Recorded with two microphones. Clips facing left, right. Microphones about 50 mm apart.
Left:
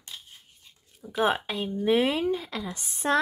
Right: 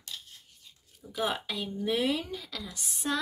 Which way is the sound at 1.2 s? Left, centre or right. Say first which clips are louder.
Left 6 dB; left.